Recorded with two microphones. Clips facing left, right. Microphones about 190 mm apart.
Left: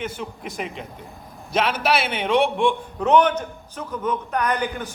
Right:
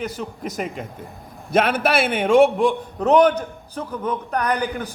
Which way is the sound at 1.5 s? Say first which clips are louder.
Right 3 dB; 55° right (ahead or behind).